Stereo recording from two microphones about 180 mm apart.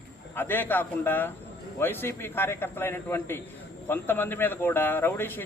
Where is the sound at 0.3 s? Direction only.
10° left (ahead or behind).